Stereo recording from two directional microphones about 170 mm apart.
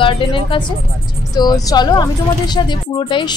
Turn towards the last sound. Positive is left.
turn(degrees=30)  # may be behind; listen again after turning